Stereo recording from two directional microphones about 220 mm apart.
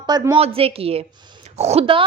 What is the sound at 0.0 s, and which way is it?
A woman's voice, 20° right (ahead or behind).